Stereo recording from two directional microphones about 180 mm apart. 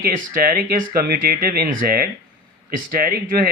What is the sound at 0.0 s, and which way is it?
Speech, 50° right (ahead or behind).